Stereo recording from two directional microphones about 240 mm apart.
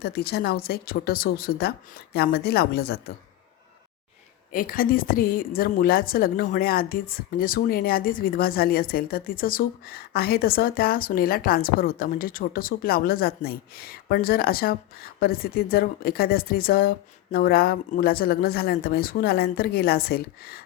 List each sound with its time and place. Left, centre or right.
0.0 s a woman's voice: left
4.5 s a woman's voice: left